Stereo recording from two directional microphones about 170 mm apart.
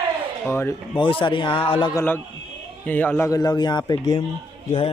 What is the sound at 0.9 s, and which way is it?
A man's voice, 30° left (ahead or behind).